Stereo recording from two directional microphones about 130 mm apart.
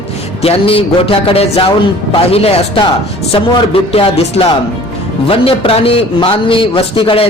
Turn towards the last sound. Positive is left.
turn(degrees=40)  # may be behind; listen again after turning